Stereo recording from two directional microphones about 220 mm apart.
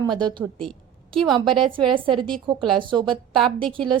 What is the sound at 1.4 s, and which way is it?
Speech, 20° right (ahead or behind).